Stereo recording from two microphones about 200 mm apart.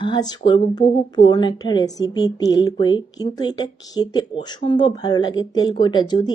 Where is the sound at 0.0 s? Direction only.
20° left (ahead or behind).